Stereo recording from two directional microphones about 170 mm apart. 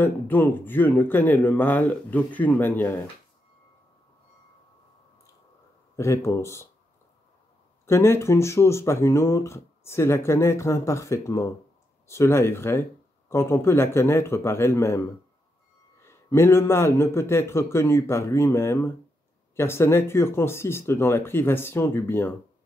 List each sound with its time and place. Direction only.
0.0 s speech: 10° left (ahead or behind)
5.9 s speech: 15° left (ahead or behind)
7.8 s speech: 15° left (ahead or behind)